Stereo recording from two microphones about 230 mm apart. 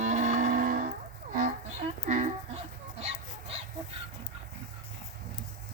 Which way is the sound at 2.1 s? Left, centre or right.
Right.